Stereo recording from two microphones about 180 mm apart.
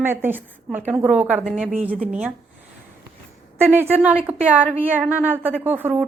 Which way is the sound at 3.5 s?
15° right (ahead or behind).